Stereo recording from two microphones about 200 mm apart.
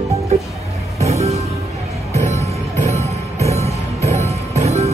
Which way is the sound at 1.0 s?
35° right (ahead or behind).